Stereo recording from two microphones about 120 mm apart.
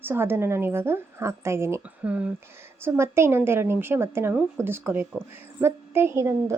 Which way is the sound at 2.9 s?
20° right (ahead or behind).